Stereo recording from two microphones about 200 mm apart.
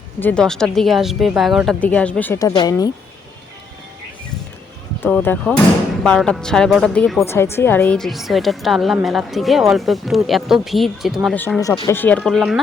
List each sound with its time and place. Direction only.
0.2 s a woman's voice: 5° left (ahead or behind)
2.5 s speech: 20° left (ahead or behind)
5.0 s a woman's voice: 5° left (ahead or behind)
7.3 s a woman's voice: 10° left (ahead or behind)
11.3 s a woman's voice: 10° left (ahead or behind)